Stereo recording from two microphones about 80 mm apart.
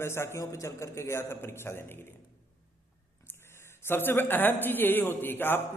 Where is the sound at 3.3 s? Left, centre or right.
Left.